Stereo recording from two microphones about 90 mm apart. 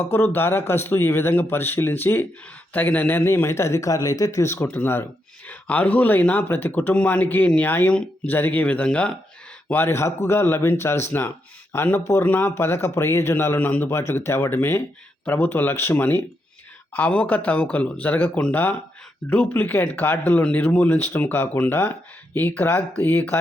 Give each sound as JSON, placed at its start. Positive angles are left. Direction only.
{"t": 0.0, "sound": "speech", "side_deg": 25}
{"t": 9.7, "sound": "speech", "side_deg": 30}
{"t": 13.6, "sound": "speech", "side_deg": 20}